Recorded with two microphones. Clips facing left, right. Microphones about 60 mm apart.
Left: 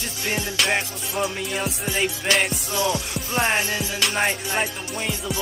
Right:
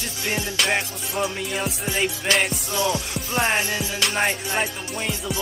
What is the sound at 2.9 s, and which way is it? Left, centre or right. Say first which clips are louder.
Music: even; left.